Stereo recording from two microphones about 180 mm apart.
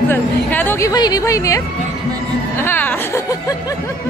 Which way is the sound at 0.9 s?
20° left (ahead or behind).